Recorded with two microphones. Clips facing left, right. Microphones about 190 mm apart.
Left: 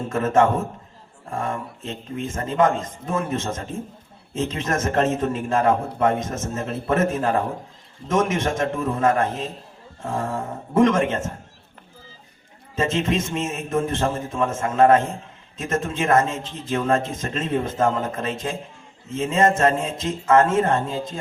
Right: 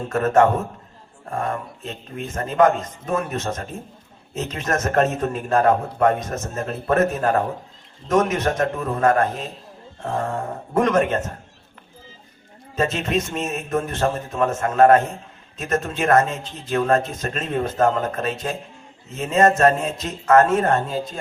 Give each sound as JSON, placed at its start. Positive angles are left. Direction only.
{"t": 0.1, "sound": "a man's voice", "side_deg": 25}
{"t": 1.8, "sound": "a man's voice", "side_deg": 25}
{"t": 10.8, "sound": "a man's voice", "side_deg": 25}
{"t": 12.7, "sound": "a man's voice", "side_deg": 25}